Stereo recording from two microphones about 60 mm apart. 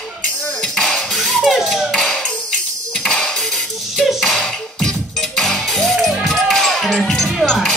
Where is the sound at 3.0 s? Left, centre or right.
Centre.